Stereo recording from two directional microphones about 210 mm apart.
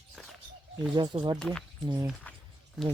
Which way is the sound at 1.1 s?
20° right (ahead or behind).